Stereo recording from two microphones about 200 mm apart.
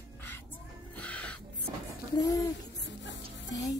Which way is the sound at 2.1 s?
15° left (ahead or behind).